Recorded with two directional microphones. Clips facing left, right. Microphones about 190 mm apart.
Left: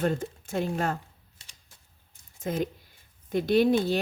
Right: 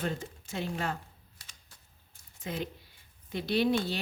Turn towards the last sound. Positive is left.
turn(degrees=45)  # may be behind; listen again after turning